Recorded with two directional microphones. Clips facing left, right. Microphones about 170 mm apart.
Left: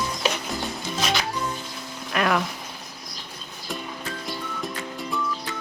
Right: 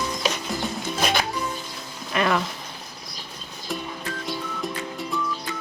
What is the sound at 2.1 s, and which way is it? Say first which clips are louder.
Speech: even; centre (ahead or behind).